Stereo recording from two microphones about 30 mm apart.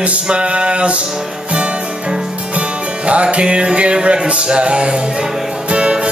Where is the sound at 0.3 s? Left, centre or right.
Right.